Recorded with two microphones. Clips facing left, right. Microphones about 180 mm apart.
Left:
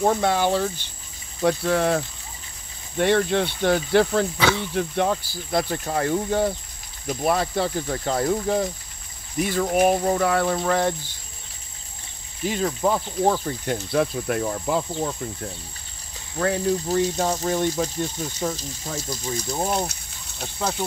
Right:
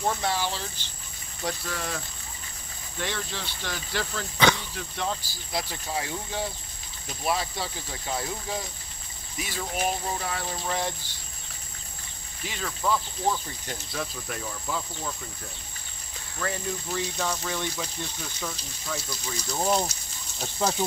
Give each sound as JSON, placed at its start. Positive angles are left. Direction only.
{"t": 0.0, "sound": "speech", "side_deg": 55}
{"t": 12.4, "sound": "speech", "side_deg": 40}
{"t": 16.3, "sound": "speech", "side_deg": 45}
{"t": 20.3, "sound": "speech", "side_deg": 0}